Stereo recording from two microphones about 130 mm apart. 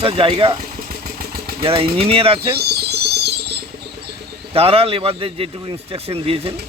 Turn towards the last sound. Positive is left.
turn(degrees=-50)  # may be behind; listen again after turning